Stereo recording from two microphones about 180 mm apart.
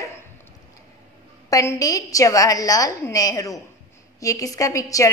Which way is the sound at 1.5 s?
20° left (ahead or behind).